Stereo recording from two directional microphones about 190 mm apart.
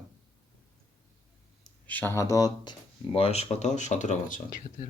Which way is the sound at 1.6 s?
10° left (ahead or behind).